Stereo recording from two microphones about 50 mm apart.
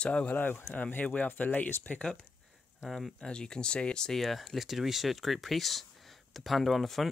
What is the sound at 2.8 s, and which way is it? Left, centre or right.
Speech, centre.